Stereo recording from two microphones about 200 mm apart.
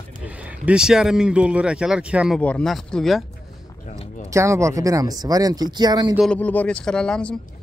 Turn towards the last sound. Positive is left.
turn(degrees=5)  # may be behind; listen again after turning